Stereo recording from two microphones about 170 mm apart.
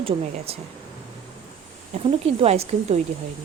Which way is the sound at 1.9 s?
35° right (ahead or behind).